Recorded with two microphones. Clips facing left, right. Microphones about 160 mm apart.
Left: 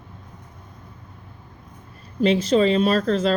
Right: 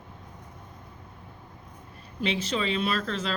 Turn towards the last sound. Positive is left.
turn(degrees=40)  # may be behind; listen again after turning